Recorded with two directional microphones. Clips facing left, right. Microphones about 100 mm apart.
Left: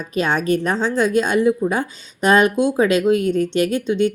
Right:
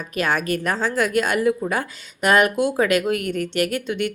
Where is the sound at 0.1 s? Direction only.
25° left (ahead or behind).